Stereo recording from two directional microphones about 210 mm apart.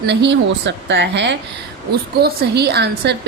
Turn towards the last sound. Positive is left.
turn(degrees=-50)  # may be behind; listen again after turning